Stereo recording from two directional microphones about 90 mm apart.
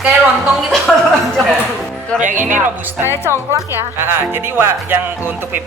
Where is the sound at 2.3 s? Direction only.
20° right (ahead or behind).